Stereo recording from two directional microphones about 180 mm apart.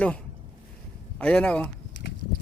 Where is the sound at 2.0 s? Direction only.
65° left (ahead or behind).